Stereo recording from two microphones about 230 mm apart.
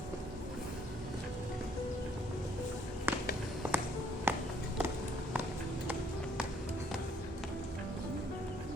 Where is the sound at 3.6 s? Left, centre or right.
Centre.